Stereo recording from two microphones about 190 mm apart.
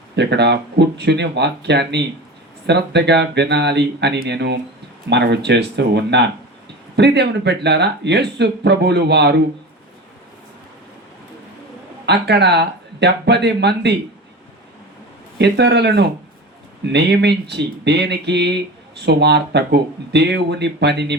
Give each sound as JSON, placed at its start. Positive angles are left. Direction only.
{"t": 0.2, "sound": "speech", "side_deg": -60}
{"t": 12.0, "sound": "speech", "side_deg": -60}
{"t": 15.4, "sound": "speech", "side_deg": -60}